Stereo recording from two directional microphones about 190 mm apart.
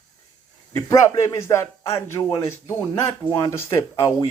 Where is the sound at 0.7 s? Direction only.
15° left (ahead or behind).